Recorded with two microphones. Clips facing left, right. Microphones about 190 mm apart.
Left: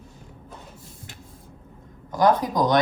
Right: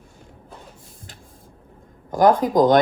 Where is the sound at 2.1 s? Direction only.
50° right (ahead or behind).